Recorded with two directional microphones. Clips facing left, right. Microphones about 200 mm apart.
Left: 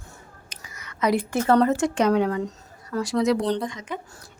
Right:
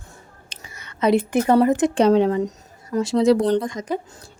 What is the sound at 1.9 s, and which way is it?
Speech, 30° right (ahead or behind).